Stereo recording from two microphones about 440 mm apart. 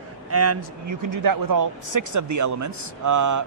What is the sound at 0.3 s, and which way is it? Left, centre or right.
A woman's voice, right.